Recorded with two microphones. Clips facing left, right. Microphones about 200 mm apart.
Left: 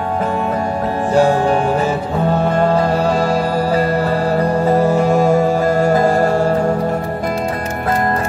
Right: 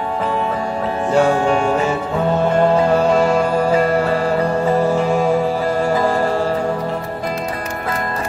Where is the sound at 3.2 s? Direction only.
35° left (ahead or behind).